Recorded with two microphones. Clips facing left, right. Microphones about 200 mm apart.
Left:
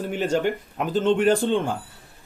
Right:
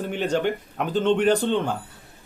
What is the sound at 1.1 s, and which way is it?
Speech, 40° left (ahead or behind).